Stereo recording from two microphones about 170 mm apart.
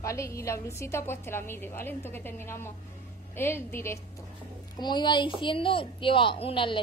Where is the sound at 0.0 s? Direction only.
15° left (ahead or behind).